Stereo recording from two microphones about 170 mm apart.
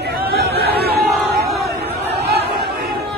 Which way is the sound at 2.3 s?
70° right (ahead or behind).